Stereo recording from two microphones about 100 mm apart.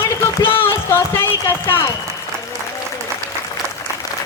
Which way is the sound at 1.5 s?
25° left (ahead or behind).